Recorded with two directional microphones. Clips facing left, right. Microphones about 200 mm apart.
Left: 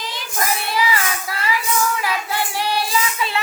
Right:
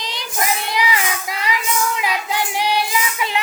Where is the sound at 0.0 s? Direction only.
15° right (ahead or behind).